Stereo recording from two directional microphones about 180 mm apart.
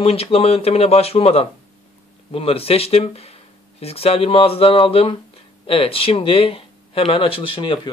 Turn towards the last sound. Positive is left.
turn(degrees=30)  # may be behind; listen again after turning